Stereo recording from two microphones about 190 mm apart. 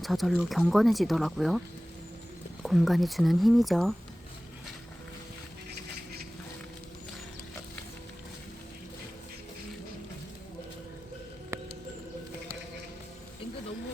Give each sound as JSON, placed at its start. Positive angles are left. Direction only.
{"t": 0.0, "sound": "speech", "side_deg": 0}
{"t": 2.6, "sound": "speech", "side_deg": 0}
{"t": 11.5, "sound": "a sound", "side_deg": -15}